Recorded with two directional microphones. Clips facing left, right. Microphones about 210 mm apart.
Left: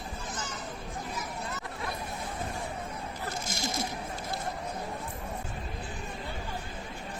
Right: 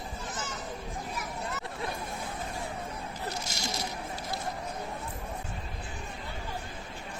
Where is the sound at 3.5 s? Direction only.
50° left (ahead or behind).